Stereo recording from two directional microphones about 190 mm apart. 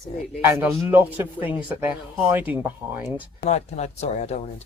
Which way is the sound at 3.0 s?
35° left (ahead or behind).